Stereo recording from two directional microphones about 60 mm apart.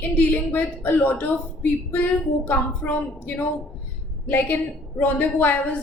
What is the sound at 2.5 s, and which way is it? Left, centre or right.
A woman's voice, left.